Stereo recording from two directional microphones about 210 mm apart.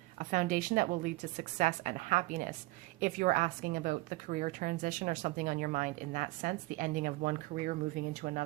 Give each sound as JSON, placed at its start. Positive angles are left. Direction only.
{"t": 0.2, "sound": "a woman's voice", "side_deg": -40}